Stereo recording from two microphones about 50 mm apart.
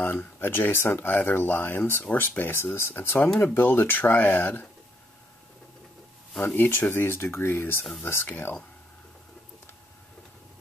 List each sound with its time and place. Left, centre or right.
0.0 s speech: left
6.4 s speech: left